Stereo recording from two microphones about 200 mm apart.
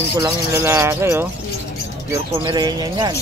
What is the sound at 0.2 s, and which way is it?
Speech, 15° right (ahead or behind).